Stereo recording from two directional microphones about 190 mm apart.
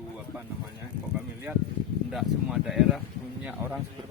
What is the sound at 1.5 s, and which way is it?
Speech, 10° right (ahead or behind).